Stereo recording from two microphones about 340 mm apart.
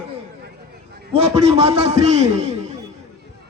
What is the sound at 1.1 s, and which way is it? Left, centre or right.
A man's voice, centre.